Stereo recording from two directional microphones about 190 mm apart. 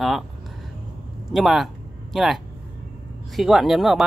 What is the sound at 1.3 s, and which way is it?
Speech, centre (ahead or behind).